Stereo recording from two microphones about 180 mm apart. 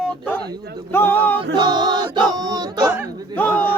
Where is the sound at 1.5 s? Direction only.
25° right (ahead or behind).